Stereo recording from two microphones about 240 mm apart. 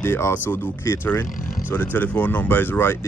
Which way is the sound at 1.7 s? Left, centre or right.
Centre.